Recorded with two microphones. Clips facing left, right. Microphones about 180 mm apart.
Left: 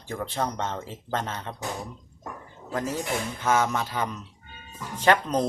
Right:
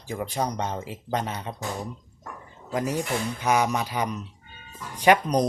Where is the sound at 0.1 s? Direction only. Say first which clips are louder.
Right 1 dB; 15° right (ahead or behind).